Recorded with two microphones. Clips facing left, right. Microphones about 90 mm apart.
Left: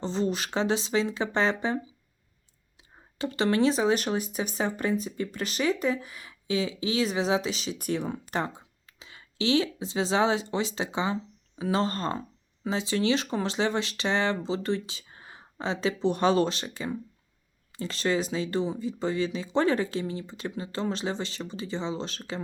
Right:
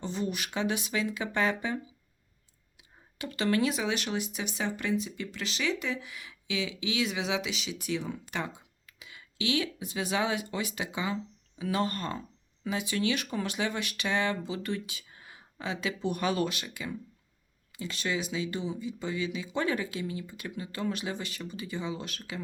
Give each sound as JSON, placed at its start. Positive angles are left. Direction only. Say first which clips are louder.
{"t": 0.0, "sound": "speech", "louder": "left 5 dB", "side_deg": 30}
{"t": 3.2, "sound": "speech", "louder": "left 4 dB", "side_deg": 25}
{"t": 8.3, "sound": "speech", "louder": "left 5 dB", "side_deg": 35}